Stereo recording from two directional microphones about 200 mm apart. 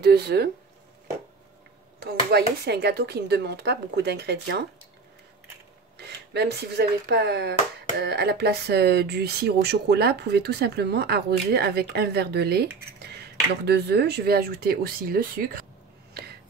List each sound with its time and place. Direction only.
0.0 s speech: 55° right (ahead or behind)
2.0 s speech: 50° right (ahead or behind)
5.9 s speech: 55° right (ahead or behind)
13.7 s speech: 55° right (ahead or behind)